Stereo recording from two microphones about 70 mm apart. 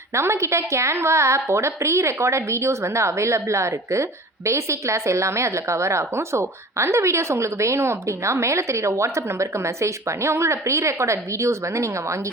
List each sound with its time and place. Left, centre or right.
0.1 s a woman's voice: right